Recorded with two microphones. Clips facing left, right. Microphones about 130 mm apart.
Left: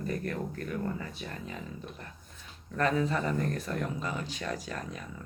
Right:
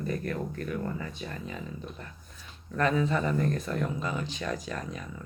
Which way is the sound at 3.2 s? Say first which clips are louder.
Right 3 dB; 25° right (ahead or behind).